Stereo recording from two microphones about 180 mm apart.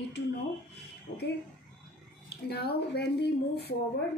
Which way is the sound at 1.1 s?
55° left (ahead or behind).